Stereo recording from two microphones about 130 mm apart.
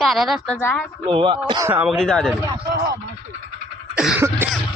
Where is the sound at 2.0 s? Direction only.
5° left (ahead or behind).